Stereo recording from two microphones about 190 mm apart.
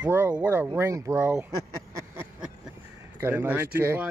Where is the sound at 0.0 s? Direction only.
10° right (ahead or behind).